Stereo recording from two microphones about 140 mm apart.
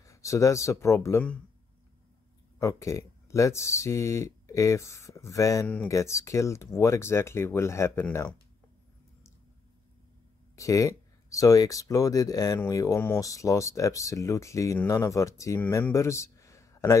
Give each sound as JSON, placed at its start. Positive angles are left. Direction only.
{"t": 0.0, "sound": "speech", "side_deg": 20}
{"t": 2.6, "sound": "speech", "side_deg": 20}
{"t": 10.5, "sound": "speech", "side_deg": 25}